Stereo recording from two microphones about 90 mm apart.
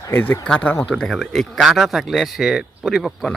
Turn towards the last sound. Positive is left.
turn(degrees=0)  # may be behind; listen again after turning